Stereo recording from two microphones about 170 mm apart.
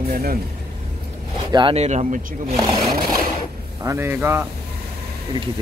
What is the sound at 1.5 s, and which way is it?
Speech, 35° right (ahead or behind).